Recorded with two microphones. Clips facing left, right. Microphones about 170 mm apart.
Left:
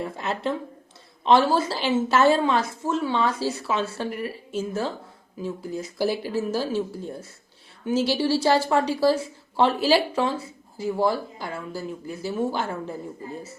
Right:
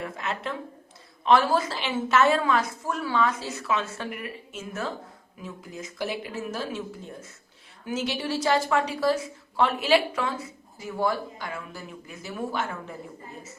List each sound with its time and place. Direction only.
0.0 s a woman's voice: 30° left (ahead or behind)